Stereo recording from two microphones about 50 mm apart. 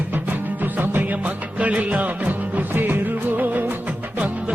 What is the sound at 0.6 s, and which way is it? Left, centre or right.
Music, right.